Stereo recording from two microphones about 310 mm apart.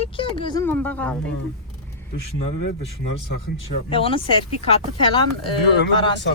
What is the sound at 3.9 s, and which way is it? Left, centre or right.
Speech, centre.